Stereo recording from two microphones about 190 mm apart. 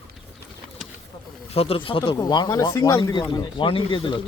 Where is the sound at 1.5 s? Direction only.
30° left (ahead or behind).